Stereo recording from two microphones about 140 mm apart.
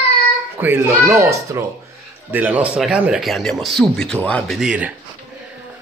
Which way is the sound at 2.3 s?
10° right (ahead or behind).